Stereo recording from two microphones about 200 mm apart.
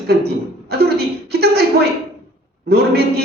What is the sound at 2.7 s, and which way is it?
Speech, 50° right (ahead or behind).